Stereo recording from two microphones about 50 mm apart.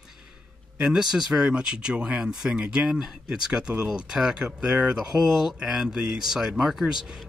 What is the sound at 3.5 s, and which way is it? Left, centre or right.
Speech, right.